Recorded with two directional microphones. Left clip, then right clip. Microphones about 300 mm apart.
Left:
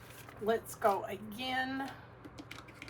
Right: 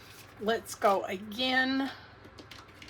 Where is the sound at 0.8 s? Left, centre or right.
Centre.